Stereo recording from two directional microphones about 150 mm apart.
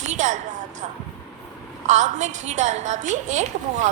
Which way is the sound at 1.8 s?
55° right (ahead or behind).